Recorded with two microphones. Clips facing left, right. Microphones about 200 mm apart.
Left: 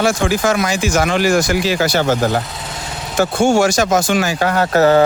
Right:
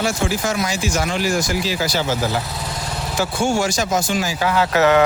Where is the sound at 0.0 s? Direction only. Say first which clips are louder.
Left 5 dB; 85° left; by 2.4 s 55° left (ahead or behind).